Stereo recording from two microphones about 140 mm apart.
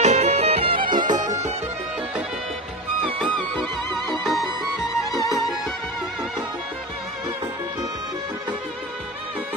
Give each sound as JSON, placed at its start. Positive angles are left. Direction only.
{"t": 0.0, "sound": "music", "side_deg": -50}
{"t": 0.8, "sound": "music", "side_deg": -70}
{"t": 3.3, "sound": "music", "side_deg": 0}